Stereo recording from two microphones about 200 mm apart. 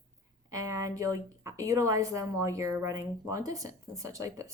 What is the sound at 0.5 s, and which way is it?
A woman's voice, 15° right (ahead or behind).